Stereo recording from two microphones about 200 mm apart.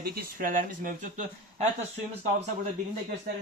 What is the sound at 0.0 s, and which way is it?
Speech, 45° right (ahead or behind).